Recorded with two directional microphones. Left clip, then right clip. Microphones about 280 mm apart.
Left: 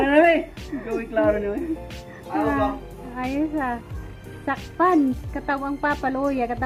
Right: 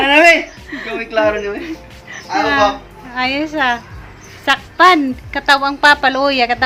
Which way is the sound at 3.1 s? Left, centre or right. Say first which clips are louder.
Right 8 dB; centre.